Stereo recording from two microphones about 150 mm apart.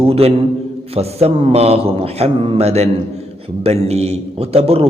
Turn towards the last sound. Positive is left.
turn(degrees=-40)  # may be behind; listen again after turning